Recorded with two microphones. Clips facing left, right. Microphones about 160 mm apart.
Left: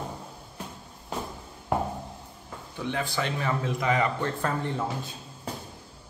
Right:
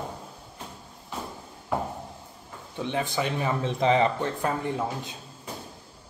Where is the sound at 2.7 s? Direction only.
20° right (ahead or behind).